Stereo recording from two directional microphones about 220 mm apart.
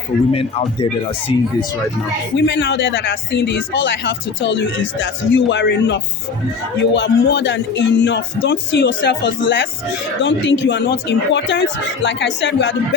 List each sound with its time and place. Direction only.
0.3 s speech: 25° left (ahead or behind)
2.3 s a man's voice: 50° left (ahead or behind)